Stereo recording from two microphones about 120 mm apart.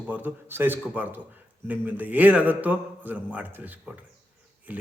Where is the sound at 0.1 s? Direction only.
15° right (ahead or behind).